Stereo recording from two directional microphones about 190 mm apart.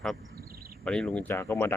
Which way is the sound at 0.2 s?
75° right (ahead or behind).